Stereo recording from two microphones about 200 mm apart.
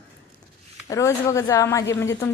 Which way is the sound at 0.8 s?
15° left (ahead or behind).